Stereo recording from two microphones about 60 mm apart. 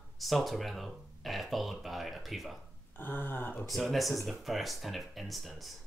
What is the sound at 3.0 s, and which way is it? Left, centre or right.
Speech, left.